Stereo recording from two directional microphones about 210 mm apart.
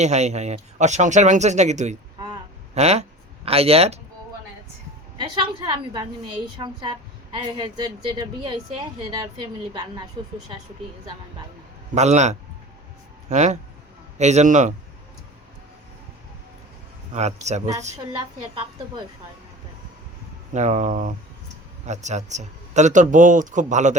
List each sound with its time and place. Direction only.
0.0 s speech: 35° right (ahead or behind)
5.3 s a woman's voice: 20° right (ahead or behind)
11.9 s speech: 35° right (ahead or behind)
17.2 s a woman's voice: 35° right (ahead or behind)
20.5 s speech: 35° right (ahead or behind)